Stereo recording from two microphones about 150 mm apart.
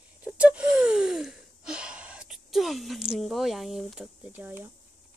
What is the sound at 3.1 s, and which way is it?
Speech, centre (ahead or behind).